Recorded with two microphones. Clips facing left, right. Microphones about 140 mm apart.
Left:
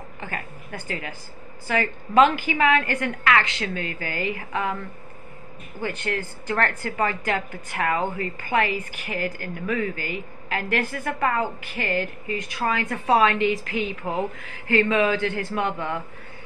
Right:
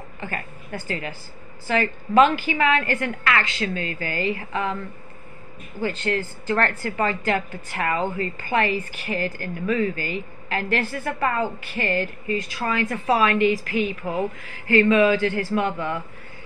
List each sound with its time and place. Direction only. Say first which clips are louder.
0.7 s a woman's voice: right 3 dB; 15° left (ahead or behind)
5.8 s a woman's voice: right 3 dB; 15° left (ahead or behind)